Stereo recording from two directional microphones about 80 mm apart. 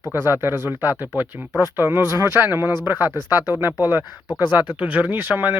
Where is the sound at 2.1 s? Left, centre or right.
Right.